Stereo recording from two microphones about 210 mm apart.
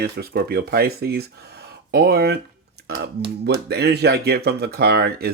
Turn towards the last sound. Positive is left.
turn(degrees=-50)  # may be behind; listen again after turning